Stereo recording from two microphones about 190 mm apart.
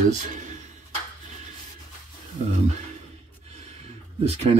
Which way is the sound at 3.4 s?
35° right (ahead or behind).